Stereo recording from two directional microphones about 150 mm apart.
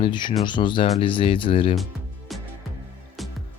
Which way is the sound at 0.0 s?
30° left (ahead or behind).